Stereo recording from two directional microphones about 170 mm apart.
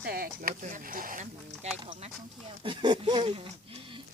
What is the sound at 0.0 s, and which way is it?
Speech, 60° right (ahead or behind).